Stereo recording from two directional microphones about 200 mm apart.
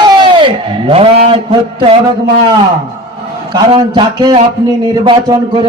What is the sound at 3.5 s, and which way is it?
Speech, 20° right (ahead or behind).